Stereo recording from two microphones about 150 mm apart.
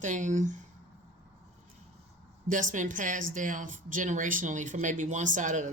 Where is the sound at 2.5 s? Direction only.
60° right (ahead or behind).